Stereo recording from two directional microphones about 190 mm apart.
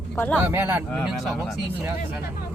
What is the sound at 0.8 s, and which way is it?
Speech, centre (ahead or behind).